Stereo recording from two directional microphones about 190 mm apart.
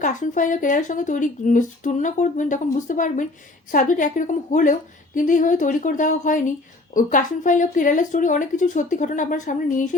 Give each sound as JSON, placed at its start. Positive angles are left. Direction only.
{"t": 0.0, "sound": "speech", "side_deg": 45}